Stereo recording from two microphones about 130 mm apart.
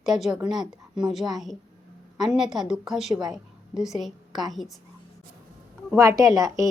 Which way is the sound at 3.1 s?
35° right (ahead or behind).